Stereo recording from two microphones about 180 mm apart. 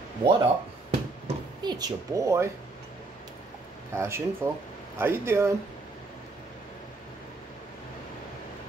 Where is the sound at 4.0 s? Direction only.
15° right (ahead or behind).